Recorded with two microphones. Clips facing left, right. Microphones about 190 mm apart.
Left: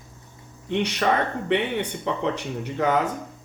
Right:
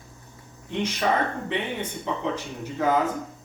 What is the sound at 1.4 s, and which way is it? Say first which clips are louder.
Speech: left 5 dB; 65° left (ahead or behind).